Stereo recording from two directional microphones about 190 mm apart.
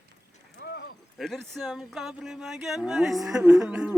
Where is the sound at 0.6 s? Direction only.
60° left (ahead or behind).